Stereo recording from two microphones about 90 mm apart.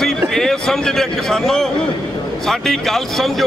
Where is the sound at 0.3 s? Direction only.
5° left (ahead or behind).